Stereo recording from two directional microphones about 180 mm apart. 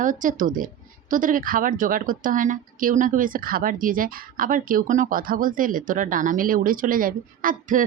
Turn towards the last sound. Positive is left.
turn(degrees=-50)  # may be behind; listen again after turning